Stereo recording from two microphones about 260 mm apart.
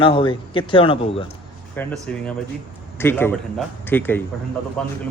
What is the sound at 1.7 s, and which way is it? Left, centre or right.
A man's voice, centre.